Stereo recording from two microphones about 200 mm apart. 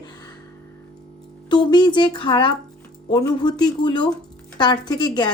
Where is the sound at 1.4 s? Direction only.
20° left (ahead or behind).